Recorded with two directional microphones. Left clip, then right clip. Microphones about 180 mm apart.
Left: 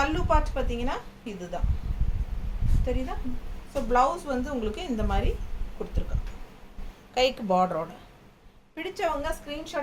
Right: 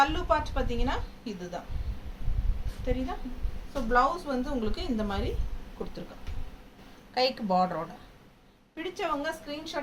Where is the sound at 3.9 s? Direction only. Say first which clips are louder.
Left 2 dB; 20° left (ahead or behind).